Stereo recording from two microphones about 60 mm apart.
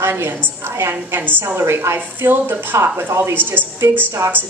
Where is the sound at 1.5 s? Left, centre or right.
Right.